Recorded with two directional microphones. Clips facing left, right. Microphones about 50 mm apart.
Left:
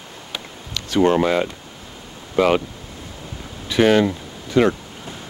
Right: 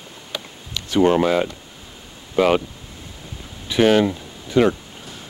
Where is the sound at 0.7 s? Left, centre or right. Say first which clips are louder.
Even; centre.